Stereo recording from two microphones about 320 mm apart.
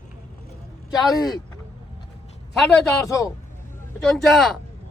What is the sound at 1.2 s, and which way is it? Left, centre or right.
Speech, centre.